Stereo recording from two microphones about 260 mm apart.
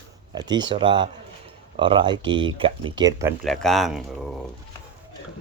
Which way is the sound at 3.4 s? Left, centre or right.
Centre.